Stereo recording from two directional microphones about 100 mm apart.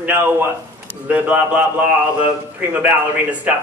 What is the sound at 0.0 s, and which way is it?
Speech, 20° right (ahead or behind).